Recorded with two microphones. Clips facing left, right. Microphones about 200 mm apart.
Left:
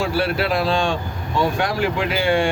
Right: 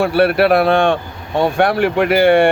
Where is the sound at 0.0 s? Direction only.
60° right (ahead or behind).